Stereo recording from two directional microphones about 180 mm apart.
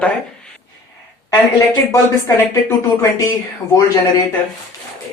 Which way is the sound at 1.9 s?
15° left (ahead or behind).